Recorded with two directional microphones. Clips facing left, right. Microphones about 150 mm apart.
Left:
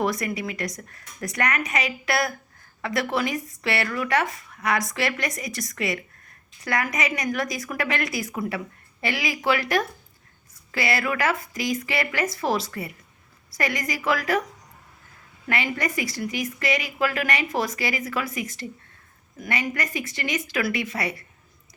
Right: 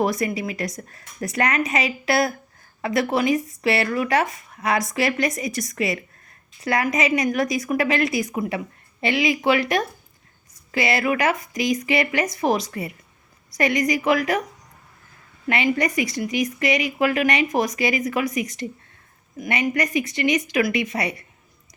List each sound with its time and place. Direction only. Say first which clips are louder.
0.0 s a woman's voice: right 3 dB; 25° right (ahead or behind)
15.4 s a woman's voice: right 5 dB; 20° right (ahead or behind)